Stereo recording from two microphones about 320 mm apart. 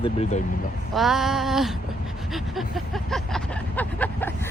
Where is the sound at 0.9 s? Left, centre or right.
Centre.